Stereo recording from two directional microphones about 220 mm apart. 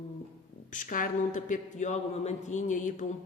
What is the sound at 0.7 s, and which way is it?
A woman's voice, 35° left (ahead or behind).